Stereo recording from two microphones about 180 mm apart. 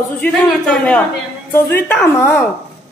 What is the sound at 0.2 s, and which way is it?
A woman's voice, 5° left (ahead or behind).